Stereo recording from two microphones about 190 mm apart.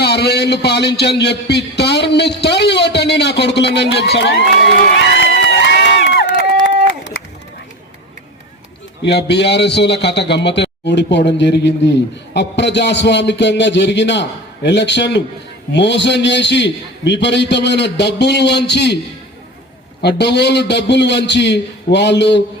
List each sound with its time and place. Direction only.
0.0 s a man's voice: 60° left (ahead or behind)
9.0 s a man's voice: 65° left (ahead or behind)
20.0 s a man's voice: 60° left (ahead or behind)